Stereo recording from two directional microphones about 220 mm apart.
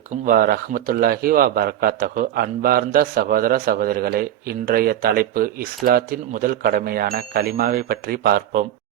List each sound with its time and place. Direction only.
0.3 s a man's voice: 40° right (ahead or behind)